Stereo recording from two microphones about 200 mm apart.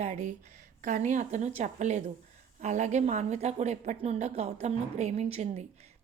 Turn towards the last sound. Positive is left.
turn(degrees=-35)  # may be behind; listen again after turning